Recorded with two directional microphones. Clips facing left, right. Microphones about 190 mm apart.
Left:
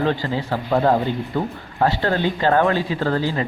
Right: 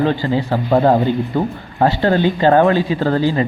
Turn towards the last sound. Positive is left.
turn(degrees=-20)  # may be behind; listen again after turning